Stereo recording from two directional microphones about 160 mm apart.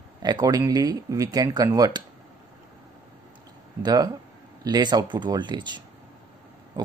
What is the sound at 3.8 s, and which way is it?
Speech, 25° right (ahead or behind).